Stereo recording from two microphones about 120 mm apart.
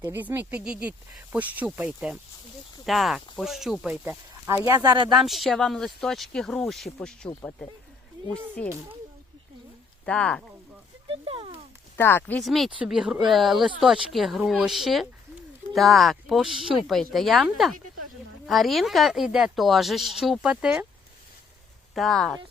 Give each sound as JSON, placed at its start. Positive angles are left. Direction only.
{"t": 0.1, "sound": "speech", "side_deg": -15}
{"t": 4.0, "sound": "speech", "side_deg": -20}
{"t": 4.7, "sound": "speech", "side_deg": -30}
{"t": 5.1, "sound": "speech", "side_deg": 0}
{"t": 10.1, "sound": "speech", "side_deg": 10}
{"t": 11.1, "sound": "a sound", "side_deg": -45}
{"t": 11.9, "sound": "speech", "side_deg": 20}
{"t": 12.4, "sound": "speech", "side_deg": 0}
{"t": 21.9, "sound": "speech", "side_deg": 0}